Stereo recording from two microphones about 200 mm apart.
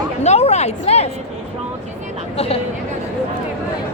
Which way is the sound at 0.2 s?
35° left (ahead or behind).